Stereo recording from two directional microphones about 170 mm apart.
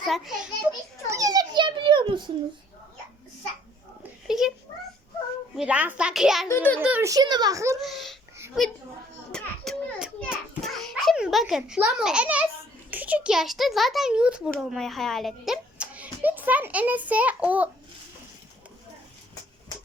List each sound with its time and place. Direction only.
0.0 s a child's voice: 5° right (ahead or behind)
1.0 s a sound: 20° right (ahead or behind)
4.3 s cat: 5° right (ahead or behind)
5.5 s a child's voice: 5° right (ahead or behind)
6.5 s a child's voice: 10° left (ahead or behind)
6.7 s a child's voice: 10° right (ahead or behind)
7.1 s a child's voice: 25° right (ahead or behind)
7.8 s babbling: centre (ahead or behind)
9.3 s children playing: 5° left (ahead or behind)
12.9 s a child's voice: 10° right (ahead or behind)